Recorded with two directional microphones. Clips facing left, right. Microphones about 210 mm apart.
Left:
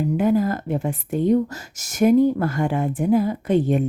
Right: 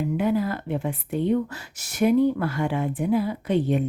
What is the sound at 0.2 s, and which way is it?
Speech, 45° left (ahead or behind).